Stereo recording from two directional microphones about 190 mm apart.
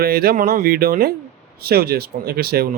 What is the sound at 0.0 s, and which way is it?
Speech, 50° right (ahead or behind).